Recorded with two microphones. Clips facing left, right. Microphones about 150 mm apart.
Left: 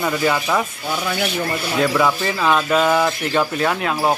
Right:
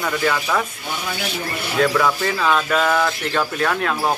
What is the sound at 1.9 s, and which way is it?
Speech, 10° left (ahead or behind).